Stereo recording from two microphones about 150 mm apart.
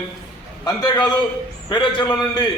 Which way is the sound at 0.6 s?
25° left (ahead or behind).